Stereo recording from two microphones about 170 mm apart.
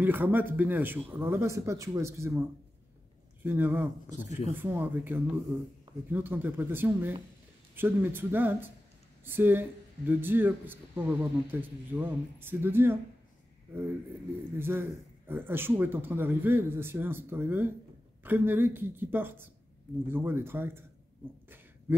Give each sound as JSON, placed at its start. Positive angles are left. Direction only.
{"t": 0.0, "sound": "a man's voice", "side_deg": -10}
{"t": 3.4, "sound": "a man's voice", "side_deg": -10}
{"t": 14.5, "sound": "a man's voice", "side_deg": -15}
{"t": 21.9, "sound": "a sound", "side_deg": -10}